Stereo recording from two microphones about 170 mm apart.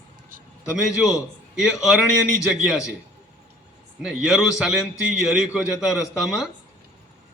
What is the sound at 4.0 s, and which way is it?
A man's voice, 5° right (ahead or behind).